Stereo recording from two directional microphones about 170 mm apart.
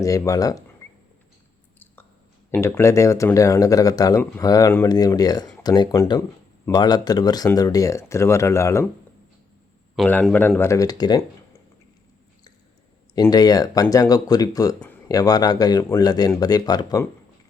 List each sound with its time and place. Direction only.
0.0 s speech: 20° left (ahead or behind)
0.8 s a sound: 15° left (ahead or behind)
2.5 s speech: 15° left (ahead or behind)
10.1 s speech: 10° left (ahead or behind)
13.1 s speech: 25° left (ahead or behind)